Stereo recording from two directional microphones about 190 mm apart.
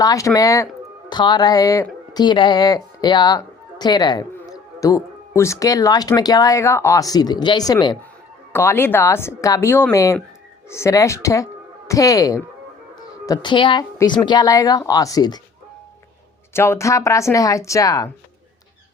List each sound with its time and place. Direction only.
0.0 s speech: 20° left (ahead or behind)
16.5 s speech: 15° left (ahead or behind)